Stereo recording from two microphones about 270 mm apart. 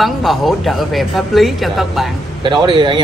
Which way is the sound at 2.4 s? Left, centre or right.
Centre.